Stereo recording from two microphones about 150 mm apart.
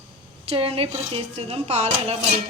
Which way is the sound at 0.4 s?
40° right (ahead or behind).